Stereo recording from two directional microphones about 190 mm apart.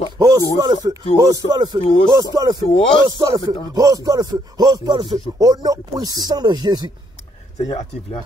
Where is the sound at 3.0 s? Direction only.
20° right (ahead or behind).